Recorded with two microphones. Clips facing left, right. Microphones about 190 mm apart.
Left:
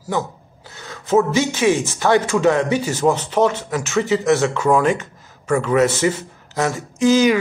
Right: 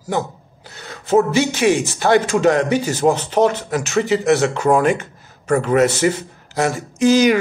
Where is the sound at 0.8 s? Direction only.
35° right (ahead or behind).